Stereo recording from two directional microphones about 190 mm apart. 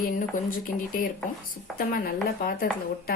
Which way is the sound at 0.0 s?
45° left (ahead or behind).